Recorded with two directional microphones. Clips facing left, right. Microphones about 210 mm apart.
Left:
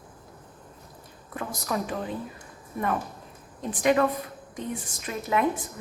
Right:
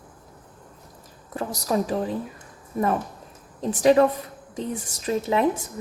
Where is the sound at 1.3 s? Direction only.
35° right (ahead or behind).